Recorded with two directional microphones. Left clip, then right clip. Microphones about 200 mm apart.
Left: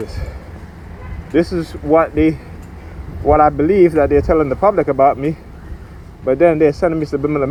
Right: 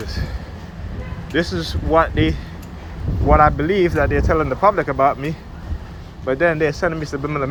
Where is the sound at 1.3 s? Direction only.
50° left (ahead or behind).